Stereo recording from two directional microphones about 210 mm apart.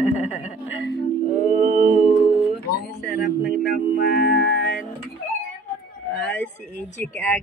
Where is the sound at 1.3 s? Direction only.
40° left (ahead or behind).